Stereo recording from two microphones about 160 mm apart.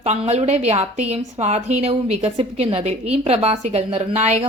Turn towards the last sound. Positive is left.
turn(degrees=-45)  # may be behind; listen again after turning